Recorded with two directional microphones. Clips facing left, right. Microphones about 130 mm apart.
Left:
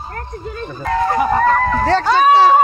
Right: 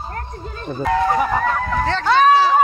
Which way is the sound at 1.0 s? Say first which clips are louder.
Left 7 dB; 5° right (ahead or behind).